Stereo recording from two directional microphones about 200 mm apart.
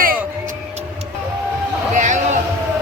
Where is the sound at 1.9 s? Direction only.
35° right (ahead or behind).